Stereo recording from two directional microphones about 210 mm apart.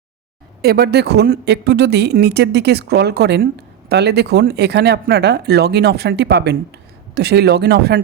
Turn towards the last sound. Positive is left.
turn(degrees=-50)  # may be behind; listen again after turning